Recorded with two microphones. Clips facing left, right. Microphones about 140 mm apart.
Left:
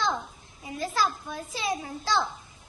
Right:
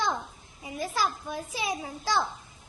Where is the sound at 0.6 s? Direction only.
15° right (ahead or behind).